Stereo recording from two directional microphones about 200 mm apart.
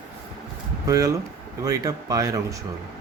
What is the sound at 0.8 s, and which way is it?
Speech, 15° right (ahead or behind).